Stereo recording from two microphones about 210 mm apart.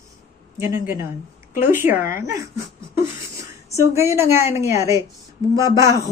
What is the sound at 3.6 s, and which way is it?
Speech, 15° right (ahead or behind).